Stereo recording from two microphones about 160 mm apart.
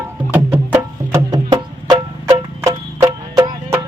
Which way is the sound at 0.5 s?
10° right (ahead or behind).